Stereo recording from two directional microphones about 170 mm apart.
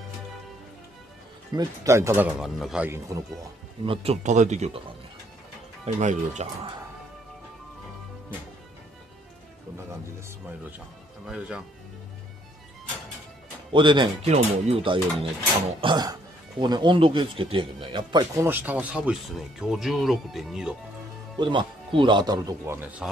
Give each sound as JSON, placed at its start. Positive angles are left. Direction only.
{"t": 1.5, "sound": "speech", "side_deg": -20}
{"t": 3.8, "sound": "speech", "side_deg": -35}
{"t": 5.9, "sound": "speech", "side_deg": -45}
{"t": 11.2, "sound": "speech", "side_deg": -5}
{"t": 13.7, "sound": "speech", "side_deg": -30}
{"t": 21.4, "sound": "speech", "side_deg": -30}